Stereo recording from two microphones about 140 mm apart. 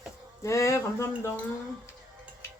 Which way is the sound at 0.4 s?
20° left (ahead or behind).